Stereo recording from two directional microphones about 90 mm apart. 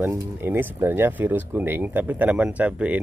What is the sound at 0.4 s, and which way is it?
Speech, 25° right (ahead or behind).